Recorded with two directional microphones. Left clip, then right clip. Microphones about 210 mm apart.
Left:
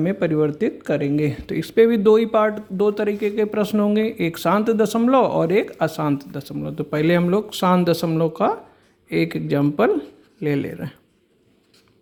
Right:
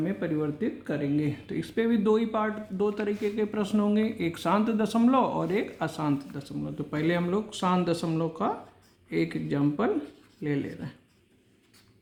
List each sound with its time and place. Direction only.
0.0 s speech: 45° left (ahead or behind)